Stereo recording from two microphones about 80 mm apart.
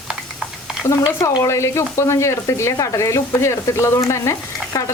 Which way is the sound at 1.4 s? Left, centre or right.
Left.